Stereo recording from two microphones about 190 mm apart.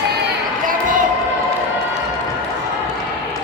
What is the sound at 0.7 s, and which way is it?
Basketball bounce, 45° right (ahead or behind).